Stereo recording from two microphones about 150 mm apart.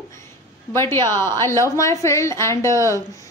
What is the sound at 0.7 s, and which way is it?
A woman's voice, 15° left (ahead or behind).